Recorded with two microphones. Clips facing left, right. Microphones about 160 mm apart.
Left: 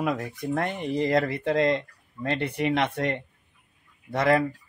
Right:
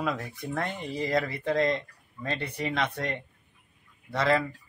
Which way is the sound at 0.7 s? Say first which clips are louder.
Left 7 dB; 20° left (ahead or behind).